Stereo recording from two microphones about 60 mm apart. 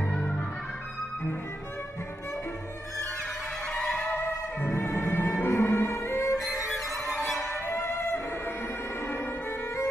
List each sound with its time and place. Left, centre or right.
0.1 s organ: centre
3.8 s music: centre
4.2 s music: left
6.4 s music: centre
7.3 s music: left